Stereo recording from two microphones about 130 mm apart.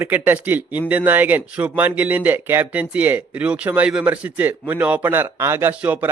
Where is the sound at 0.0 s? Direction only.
15° right (ahead or behind).